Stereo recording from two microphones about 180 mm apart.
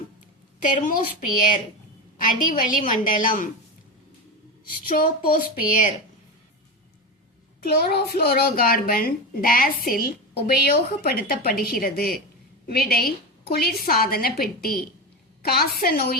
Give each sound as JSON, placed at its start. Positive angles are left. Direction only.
{"t": 0.6, "sound": "a woman's voice", "side_deg": 45}
{"t": 4.9, "sound": "a woman's voice", "side_deg": 55}
{"t": 7.6, "sound": "a woman's voice", "side_deg": 60}